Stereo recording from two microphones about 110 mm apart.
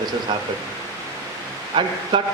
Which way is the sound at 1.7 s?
45° right (ahead or behind).